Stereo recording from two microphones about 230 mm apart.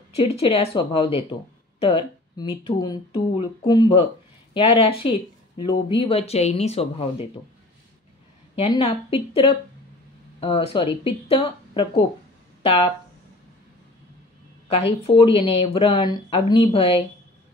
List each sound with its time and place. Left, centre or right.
0.1 s speech: left
8.5 s speech: left
14.7 s speech: left